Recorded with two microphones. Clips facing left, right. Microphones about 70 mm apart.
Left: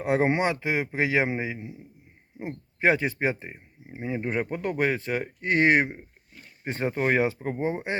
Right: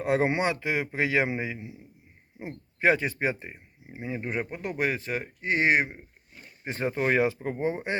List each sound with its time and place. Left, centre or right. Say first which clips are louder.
0.0 s a man's voice: left 1 dB; left
6.7 s a man's voice: left 1 dB; left